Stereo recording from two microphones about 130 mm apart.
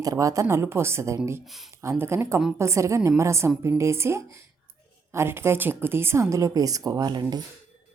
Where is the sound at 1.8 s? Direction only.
20° right (ahead or behind).